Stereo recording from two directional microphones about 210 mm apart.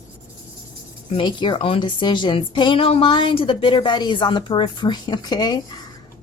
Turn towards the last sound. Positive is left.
turn(degrees=20)  # may be behind; listen again after turning